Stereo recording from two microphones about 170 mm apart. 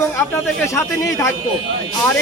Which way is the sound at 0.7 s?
15° left (ahead or behind).